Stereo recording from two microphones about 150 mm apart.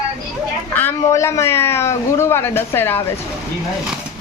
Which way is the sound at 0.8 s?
15° left (ahead or behind).